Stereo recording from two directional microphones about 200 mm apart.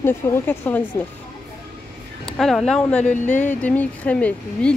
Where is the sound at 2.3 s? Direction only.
Centre (ahead or behind).